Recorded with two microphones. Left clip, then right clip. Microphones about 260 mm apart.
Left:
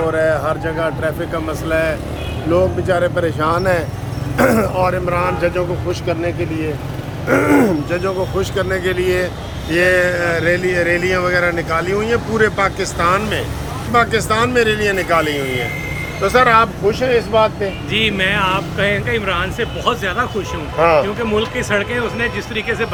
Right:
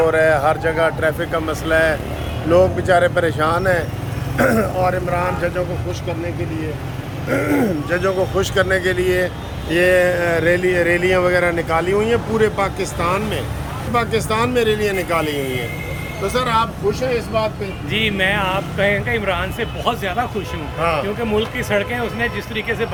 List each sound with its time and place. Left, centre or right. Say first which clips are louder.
0.1 s a man's voice: right 1 dB; centre
16.2 s speech: left 7 dB; centre
17.9 s speech: left 1 dB; centre
20.7 s speech: left 7 dB; centre
21.3 s a man's voice: left 1 dB; centre